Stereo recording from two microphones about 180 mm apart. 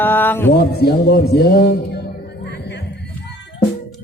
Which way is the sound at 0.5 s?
60° left (ahead or behind).